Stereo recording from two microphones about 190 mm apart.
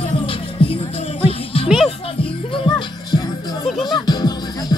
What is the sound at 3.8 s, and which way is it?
Music, 20° left (ahead or behind).